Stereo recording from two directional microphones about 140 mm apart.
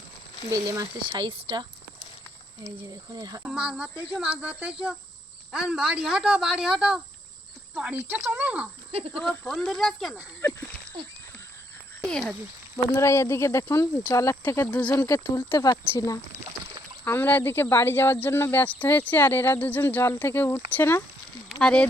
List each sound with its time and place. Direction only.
3.2 s speech: 25° right (ahead or behind)
3.4 s speech: 5° right (ahead or behind)
8.9 s speech: 45° right (ahead or behind)
9.5 s speech: 5° left (ahead or behind)
10.4 s a sound: 15° left (ahead or behind)
12.0 s speech: 5° left (ahead or behind)
12.7 s speech: 20° left (ahead or behind)
15.2 s speech: 35° left (ahead or behind); by 21.8 s 10° left (ahead or behind)